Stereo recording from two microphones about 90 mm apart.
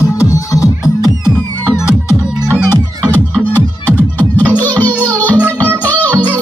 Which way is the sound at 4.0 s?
20° left (ahead or behind).